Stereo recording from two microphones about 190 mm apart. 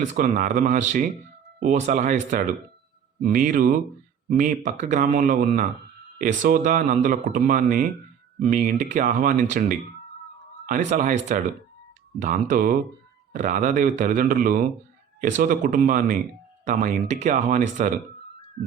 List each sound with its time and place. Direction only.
0.1 s speech: 40° right (ahead or behind)
10.8 s speech: 40° right (ahead or behind)
12.2 s speech: 40° right (ahead or behind)